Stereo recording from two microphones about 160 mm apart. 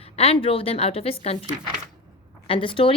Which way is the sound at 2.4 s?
35° left (ahead or behind).